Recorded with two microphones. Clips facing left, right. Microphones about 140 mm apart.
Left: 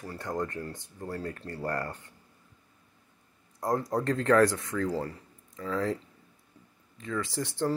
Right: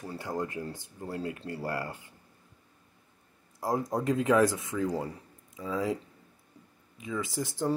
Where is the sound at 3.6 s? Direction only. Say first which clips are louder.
Left 1 dB; 10° right (ahead or behind).